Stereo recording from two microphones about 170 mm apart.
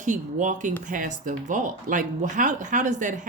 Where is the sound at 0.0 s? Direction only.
45° right (ahead or behind).